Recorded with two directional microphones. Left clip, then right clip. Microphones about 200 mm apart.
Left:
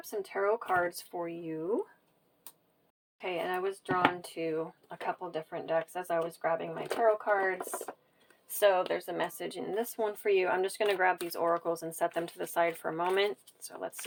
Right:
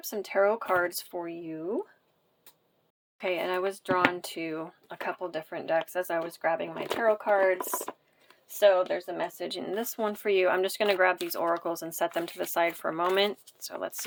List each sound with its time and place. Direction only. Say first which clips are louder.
0.0 s speech: right 6 dB; 45° right (ahead or behind)
1.2 s speech: left 2 dB; 15° right (ahead or behind)
3.2 s speech: right 4 dB; 35° right (ahead or behind)
8.5 s speech: right 4 dB; 20° right (ahead or behind)
9.5 s speech: right 2 dB; 25° right (ahead or behind)